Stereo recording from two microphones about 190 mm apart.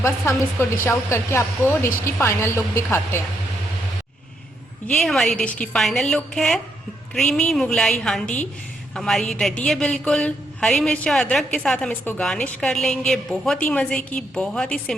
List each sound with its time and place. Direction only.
0.0 s a woman's voice: 15° left (ahead or behind)
5.0 s a woman's voice: centre (ahead or behind)